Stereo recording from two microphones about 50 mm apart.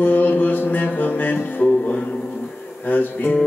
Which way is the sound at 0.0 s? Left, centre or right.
Left.